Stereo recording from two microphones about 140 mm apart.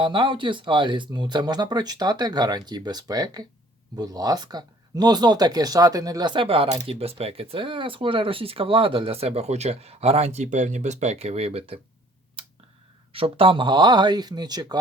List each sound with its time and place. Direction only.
0.0 s speech: 35° right (ahead or behind)
12.4 s a sound: 40° right (ahead or behind)
13.1 s speech: 40° right (ahead or behind)